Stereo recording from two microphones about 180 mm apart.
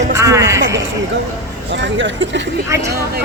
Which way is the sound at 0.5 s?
90° right.